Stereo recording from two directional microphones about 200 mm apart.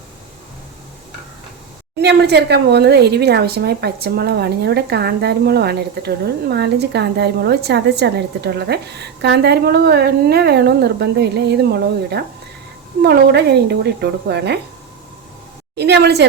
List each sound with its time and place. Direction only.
2.0 s speech: 55° right (ahead or behind)
15.7 s speech: 55° right (ahead or behind)